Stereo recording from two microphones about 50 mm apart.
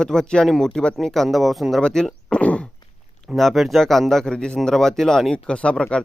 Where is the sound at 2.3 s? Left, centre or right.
Left.